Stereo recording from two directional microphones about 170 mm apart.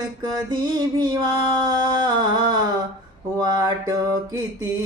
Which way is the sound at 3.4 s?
20° right (ahead or behind).